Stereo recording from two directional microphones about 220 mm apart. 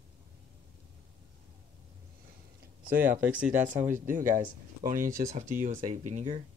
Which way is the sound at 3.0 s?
5° right (ahead or behind).